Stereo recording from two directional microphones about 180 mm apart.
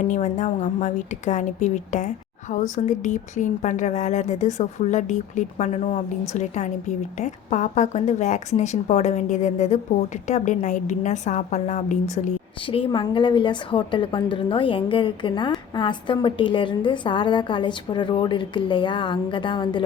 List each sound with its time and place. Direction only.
0.1 s speech: 40° left (ahead or behind)
12.6 s a woman's voice: 30° left (ahead or behind)